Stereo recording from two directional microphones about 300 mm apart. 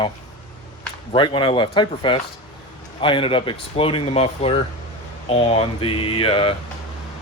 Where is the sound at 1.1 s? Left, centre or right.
Centre.